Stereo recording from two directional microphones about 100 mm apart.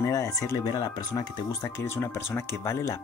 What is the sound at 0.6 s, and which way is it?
Speech, 45° left (ahead or behind).